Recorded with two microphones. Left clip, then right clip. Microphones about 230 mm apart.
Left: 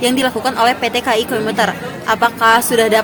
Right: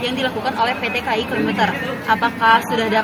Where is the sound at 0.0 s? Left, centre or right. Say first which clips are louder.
Left 5 dB; left.